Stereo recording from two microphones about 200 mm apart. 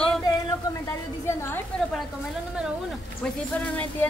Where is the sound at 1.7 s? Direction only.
5° left (ahead or behind).